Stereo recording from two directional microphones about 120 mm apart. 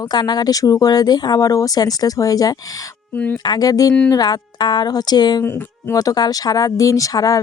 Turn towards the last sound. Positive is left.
turn(degrees=30)  # may be behind; listen again after turning